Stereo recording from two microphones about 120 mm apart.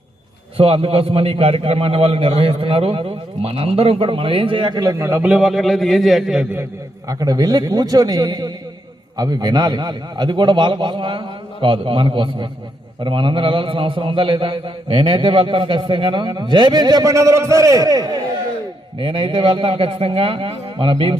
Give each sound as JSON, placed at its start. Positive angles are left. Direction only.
{"t": 0.5, "sound": "a man's voice", "side_deg": -55}
{"t": 4.9, "sound": "a man's voice", "side_deg": -20}
{"t": 7.1, "sound": "a man's voice", "side_deg": -30}
{"t": 18.9, "sound": "a man's voice", "side_deg": -45}